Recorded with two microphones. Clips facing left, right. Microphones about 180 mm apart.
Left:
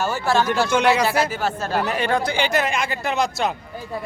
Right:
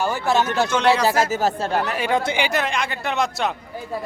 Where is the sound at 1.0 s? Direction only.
45° right (ahead or behind).